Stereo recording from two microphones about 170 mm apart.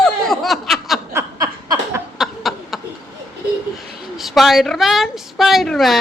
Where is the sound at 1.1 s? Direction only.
20° right (ahead or behind).